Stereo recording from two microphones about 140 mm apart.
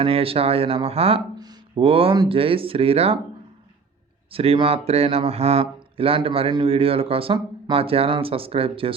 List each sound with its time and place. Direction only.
0.0 s speech: 45° right (ahead or behind)
1.4 s a sound: 30° right (ahead or behind)
1.8 s speech: 40° right (ahead or behind)
4.3 s speech: 40° right (ahead or behind)